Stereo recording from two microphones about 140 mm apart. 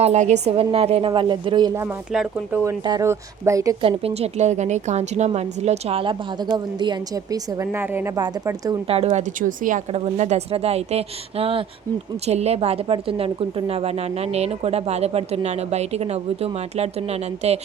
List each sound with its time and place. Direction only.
0.0 s speech: 55° right (ahead or behind); by 1.7 s 35° right (ahead or behind)
2.1 s speech: 5° right (ahead or behind)
2.6 s speech: 25° right (ahead or behind)
3.8 s speech: 45° right (ahead or behind); by 8.2 s 15° right (ahead or behind)
8.9 s speech: 50° right (ahead or behind)
9.4 s a woman's voice: 70° right (ahead or behind)
9.9 s speech: 50° right (ahead or behind)